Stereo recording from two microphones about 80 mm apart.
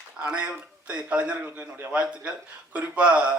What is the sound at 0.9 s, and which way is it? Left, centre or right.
Speech, centre.